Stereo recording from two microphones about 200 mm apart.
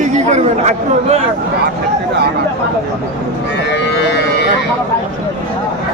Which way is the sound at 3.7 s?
60° left (ahead or behind).